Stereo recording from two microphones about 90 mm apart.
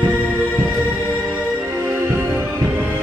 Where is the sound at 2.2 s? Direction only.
30° right (ahead or behind).